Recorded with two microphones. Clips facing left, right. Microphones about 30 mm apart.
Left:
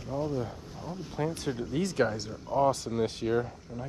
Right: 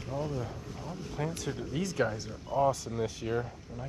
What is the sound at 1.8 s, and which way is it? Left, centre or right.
Speech, left.